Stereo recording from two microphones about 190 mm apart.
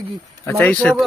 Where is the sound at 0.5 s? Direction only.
5° left (ahead or behind).